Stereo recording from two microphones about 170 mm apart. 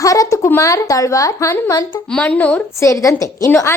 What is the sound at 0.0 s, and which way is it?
A woman's voice, 20° left (ahead or behind).